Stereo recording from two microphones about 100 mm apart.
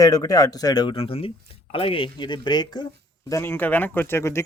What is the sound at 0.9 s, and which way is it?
Speech, 65° left (ahead or behind).